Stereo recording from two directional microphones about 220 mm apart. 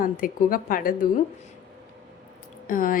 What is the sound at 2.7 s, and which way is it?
Speech, 40° left (ahead or behind).